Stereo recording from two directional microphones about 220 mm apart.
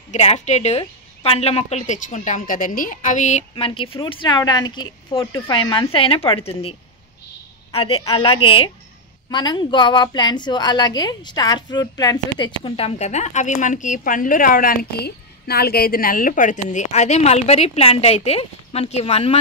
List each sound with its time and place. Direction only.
0.1 s a woman's voice: 30° left (ahead or behind)
7.7 s a woman's voice: 25° left (ahead or behind)